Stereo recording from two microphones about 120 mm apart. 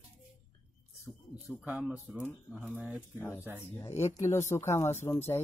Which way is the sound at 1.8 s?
15° right (ahead or behind).